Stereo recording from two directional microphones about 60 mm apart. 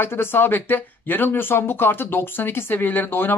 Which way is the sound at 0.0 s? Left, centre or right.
Left.